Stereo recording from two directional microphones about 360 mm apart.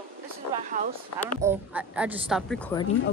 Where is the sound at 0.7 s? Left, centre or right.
Right.